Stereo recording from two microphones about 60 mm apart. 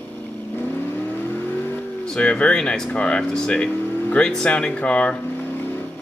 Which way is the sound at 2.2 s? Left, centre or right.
Centre.